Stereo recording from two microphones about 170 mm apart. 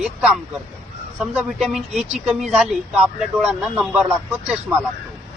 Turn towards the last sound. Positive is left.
turn(degrees=-5)  # may be behind; listen again after turning